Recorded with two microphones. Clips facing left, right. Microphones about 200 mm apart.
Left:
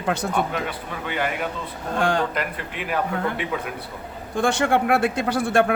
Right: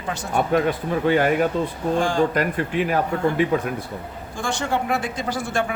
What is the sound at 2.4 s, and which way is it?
Speech, 40° right (ahead or behind).